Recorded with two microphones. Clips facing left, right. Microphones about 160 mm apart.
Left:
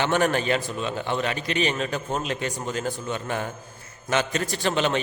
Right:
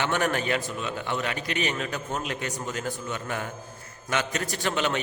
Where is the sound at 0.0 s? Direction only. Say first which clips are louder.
Left 4 dB; 30° left (ahead or behind).